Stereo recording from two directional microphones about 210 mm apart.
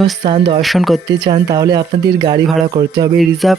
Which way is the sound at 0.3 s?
25° right (ahead or behind).